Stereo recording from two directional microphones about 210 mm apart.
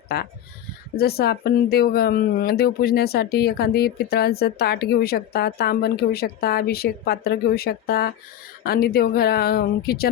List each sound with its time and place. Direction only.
0.1 s speech: 50° left (ahead or behind)